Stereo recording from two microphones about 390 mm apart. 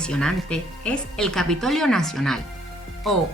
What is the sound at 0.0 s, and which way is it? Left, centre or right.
Speech, centre.